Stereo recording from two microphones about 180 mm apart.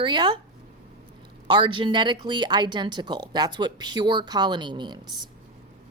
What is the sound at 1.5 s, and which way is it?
Speech, 25° right (ahead or behind).